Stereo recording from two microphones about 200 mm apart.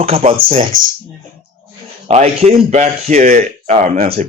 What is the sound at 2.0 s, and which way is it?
A man's voice, 30° right (ahead or behind).